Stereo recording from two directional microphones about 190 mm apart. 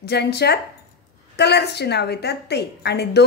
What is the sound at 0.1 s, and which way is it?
A woman's voice, 60° left (ahead or behind).